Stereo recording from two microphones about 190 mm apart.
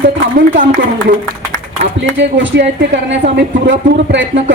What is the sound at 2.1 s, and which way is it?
A woman's voice, 70° right (ahead or behind).